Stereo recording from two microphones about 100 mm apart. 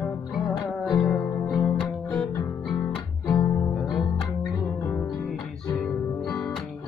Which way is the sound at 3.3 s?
45° left (ahead or behind).